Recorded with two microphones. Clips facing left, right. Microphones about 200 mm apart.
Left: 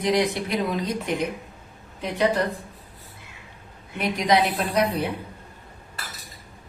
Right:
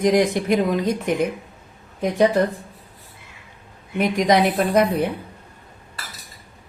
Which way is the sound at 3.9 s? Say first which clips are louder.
Right 4 dB; 50° right (ahead or behind).